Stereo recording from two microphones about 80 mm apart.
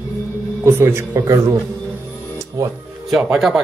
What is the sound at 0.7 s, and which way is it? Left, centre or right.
Speech, right.